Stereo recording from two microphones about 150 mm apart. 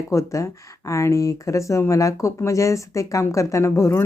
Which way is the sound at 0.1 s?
20° left (ahead or behind).